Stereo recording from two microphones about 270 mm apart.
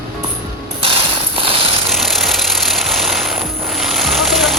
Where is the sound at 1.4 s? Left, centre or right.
Centre.